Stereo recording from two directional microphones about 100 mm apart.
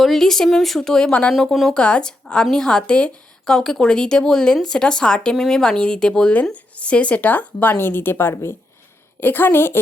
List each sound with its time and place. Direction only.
0.0 s a woman's voice: 5° left (ahead or behind); by 9.7 s 20° left (ahead or behind)